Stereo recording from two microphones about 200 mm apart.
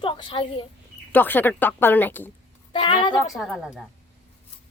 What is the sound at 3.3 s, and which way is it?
Speech, centre (ahead or behind).